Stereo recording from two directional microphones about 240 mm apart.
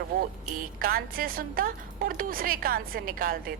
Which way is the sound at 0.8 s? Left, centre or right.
Right.